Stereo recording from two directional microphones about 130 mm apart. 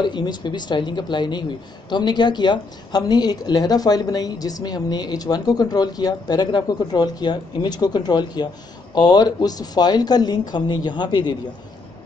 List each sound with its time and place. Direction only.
0.0 s a woman's voice: 35° left (ahead or behind)